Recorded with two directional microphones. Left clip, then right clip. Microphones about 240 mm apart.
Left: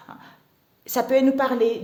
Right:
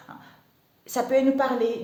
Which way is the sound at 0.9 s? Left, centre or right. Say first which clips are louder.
Left 2 dB; left.